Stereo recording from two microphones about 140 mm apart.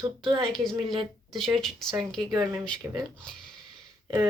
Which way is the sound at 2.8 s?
20° right (ahead or behind).